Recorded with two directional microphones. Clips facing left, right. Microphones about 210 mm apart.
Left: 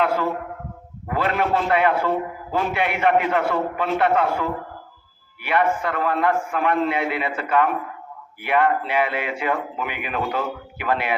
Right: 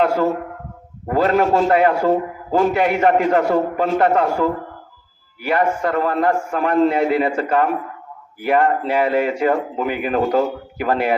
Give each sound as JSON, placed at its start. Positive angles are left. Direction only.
{"t": 1.0, "sound": "a man's voice", "side_deg": -40}